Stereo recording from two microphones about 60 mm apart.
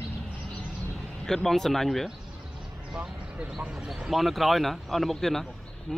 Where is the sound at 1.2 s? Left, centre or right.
Centre.